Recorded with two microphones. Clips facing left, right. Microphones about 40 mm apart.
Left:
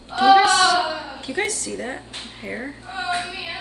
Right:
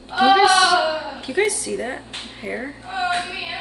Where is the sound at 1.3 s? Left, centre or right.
Centre.